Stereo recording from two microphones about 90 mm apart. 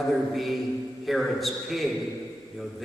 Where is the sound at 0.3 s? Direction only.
Centre (ahead or behind).